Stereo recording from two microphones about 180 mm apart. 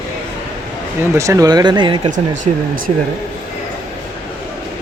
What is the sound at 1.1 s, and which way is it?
Speech, 15° right (ahead or behind).